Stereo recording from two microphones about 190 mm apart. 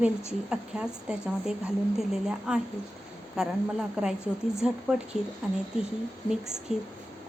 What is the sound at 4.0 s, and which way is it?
Speech, 5° right (ahead or behind).